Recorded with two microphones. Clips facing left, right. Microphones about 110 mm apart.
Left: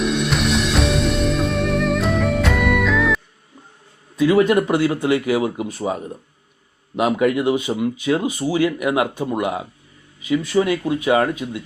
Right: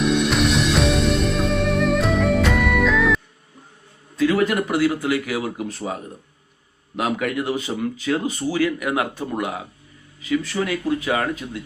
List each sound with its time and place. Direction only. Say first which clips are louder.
0.0 s music: right 1 dB; centre (ahead or behind)
4.2 s speech: left 4 dB; 20° left (ahead or behind)